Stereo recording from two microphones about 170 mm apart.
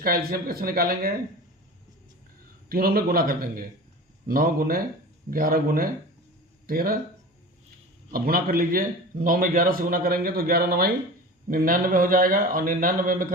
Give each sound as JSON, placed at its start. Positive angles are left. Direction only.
{"t": 0.0, "sound": "a man's voice", "side_deg": -60}
{"t": 2.6, "sound": "a man's voice", "side_deg": -60}
{"t": 8.1, "sound": "a man's voice", "side_deg": -60}